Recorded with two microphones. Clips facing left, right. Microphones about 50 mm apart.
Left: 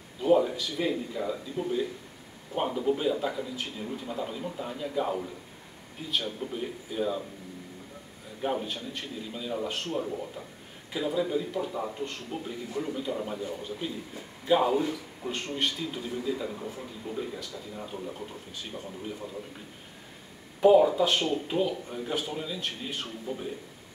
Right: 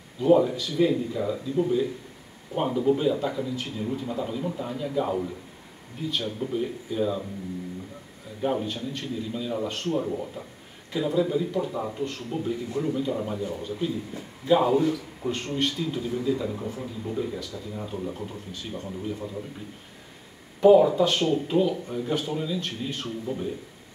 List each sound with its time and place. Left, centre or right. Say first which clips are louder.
0.2 s a man's voice: right 3 dB; centre
8.4 s a man's voice: right 4 dB; centre
10.0 s a man's voice: right 4 dB; centre
20.6 s a man's voice: right 3 dB; centre